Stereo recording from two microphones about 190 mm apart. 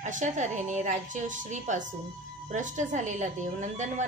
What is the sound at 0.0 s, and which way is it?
Speech, 40° right (ahead or behind).